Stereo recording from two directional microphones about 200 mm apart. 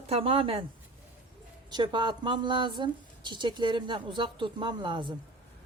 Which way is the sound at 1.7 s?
25° right (ahead or behind).